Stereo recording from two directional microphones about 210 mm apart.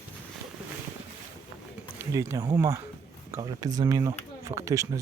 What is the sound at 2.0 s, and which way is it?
Speech, 15° right (ahead or behind).